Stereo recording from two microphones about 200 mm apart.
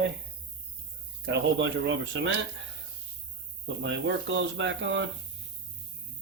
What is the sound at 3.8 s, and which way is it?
Speech, 60° right (ahead or behind).